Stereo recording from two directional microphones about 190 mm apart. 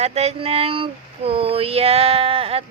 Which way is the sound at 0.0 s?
35° right (ahead or behind).